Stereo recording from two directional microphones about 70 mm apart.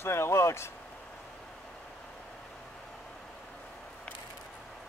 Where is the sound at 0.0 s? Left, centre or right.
Left.